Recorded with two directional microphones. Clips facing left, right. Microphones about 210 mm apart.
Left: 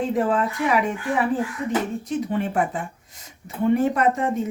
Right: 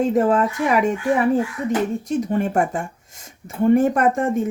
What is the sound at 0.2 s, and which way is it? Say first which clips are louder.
Speech: right 3 dB; 45° right (ahead or behind).